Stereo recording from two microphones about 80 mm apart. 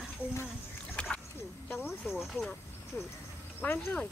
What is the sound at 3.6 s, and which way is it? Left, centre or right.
Speech, left.